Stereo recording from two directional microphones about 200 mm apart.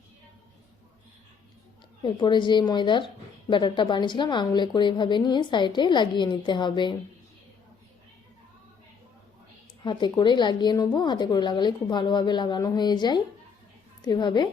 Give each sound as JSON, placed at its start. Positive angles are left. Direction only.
{"t": 2.0, "sound": "a woman's voice", "side_deg": 25}
{"t": 9.8, "sound": "a woman's voice", "side_deg": 25}